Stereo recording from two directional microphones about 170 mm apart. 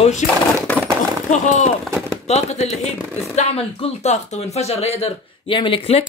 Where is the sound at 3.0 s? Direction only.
5° right (ahead or behind).